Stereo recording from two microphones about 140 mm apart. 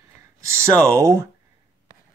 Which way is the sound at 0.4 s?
20° right (ahead or behind).